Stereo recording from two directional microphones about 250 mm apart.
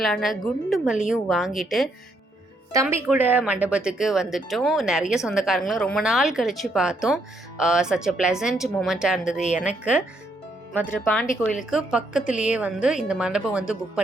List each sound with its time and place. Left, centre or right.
0.0 s speech: centre
10.8 s speech: centre
11.7 s speech: centre